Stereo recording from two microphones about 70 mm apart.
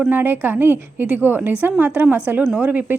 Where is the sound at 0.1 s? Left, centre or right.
Right.